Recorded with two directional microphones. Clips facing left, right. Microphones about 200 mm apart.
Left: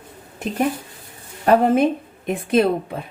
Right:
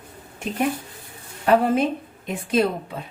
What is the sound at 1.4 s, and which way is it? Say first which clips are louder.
Speech: left 3 dB; 45° left (ahead or behind).